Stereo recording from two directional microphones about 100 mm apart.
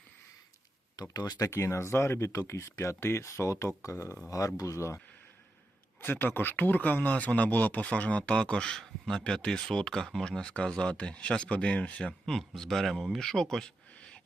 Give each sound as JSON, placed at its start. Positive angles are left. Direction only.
{"t": 1.1, "sound": "speech", "side_deg": 40}
{"t": 1.5, "sound": "speech", "side_deg": 25}
{"t": 6.0, "sound": "speech", "side_deg": 20}